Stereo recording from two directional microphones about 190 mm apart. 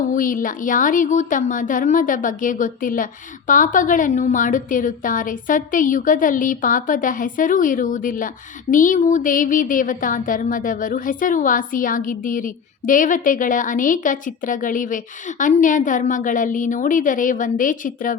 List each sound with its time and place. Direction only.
0.1 s speech: 45° left (ahead or behind)